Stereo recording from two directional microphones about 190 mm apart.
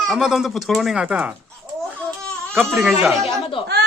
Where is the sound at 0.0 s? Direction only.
Centre (ahead or behind).